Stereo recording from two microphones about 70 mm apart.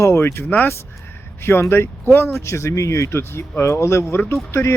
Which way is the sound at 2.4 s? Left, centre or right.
Left.